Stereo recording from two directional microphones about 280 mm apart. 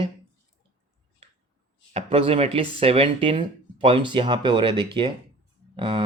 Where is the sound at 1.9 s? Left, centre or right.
Right.